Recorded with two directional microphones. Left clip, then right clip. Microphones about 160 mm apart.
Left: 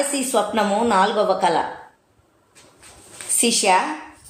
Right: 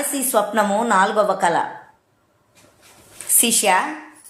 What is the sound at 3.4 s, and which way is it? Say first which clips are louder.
Speech: even; 35° right (ahead or behind).